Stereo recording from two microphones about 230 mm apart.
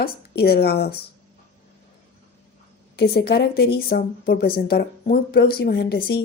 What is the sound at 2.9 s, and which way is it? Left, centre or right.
Speech, left.